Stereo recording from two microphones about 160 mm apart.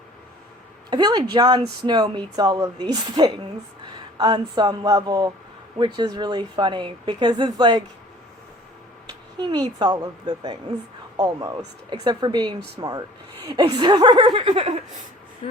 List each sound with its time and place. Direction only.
0.9 s speech: 25° right (ahead or behind)
9.4 s speech: 25° right (ahead or behind)